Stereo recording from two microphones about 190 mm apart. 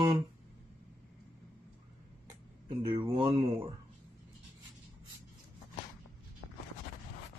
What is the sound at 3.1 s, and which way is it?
Speech, 30° right (ahead or behind).